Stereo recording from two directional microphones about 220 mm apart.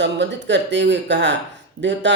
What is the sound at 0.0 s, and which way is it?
Speech, 55° right (ahead or behind).